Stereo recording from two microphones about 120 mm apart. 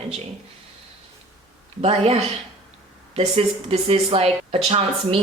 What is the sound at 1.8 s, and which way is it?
Speech, 60° right (ahead or behind).